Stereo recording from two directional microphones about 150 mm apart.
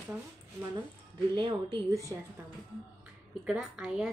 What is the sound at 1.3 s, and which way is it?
Speech, 35° right (ahead or behind).